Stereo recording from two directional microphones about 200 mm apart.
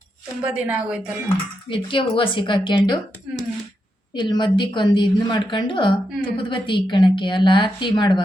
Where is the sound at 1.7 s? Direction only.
25° left (ahead or behind).